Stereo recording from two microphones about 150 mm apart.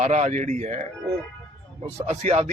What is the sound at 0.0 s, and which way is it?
Speech, 50° right (ahead or behind).